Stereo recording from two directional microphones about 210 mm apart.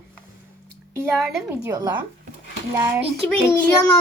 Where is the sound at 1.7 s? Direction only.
15° right (ahead or behind).